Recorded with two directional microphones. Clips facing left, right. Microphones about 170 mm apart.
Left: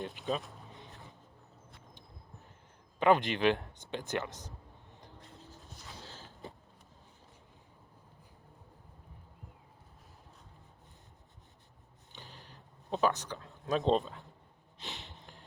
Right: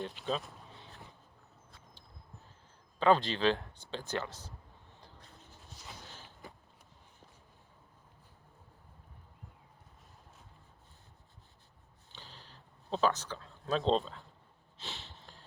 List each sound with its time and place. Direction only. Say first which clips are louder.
0.1 s speech: left 1 dB; centre (ahead or behind)
0.7 s a sound: left 2 dB; 15° left (ahead or behind)
3.0 s speech: left 1 dB; 15° left (ahead or behind)
4.9 s vehicle: left 4 dB; 20° left (ahead or behind)
12.1 s a sound: left 2 dB; 15° left (ahead or behind)
14.8 s snort: left 1 dB; 15° left (ahead or behind)